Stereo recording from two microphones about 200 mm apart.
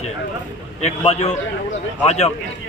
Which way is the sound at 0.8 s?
35° left (ahead or behind).